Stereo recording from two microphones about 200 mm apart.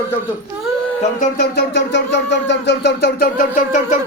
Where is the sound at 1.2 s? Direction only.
55° left (ahead or behind).